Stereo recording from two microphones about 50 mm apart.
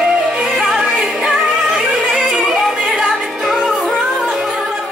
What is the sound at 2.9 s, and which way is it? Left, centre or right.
Music, centre.